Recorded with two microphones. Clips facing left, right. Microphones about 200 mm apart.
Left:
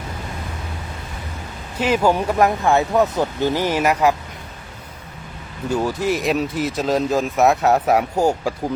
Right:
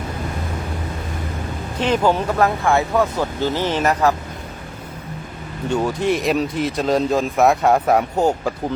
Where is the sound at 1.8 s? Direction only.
10° left (ahead or behind).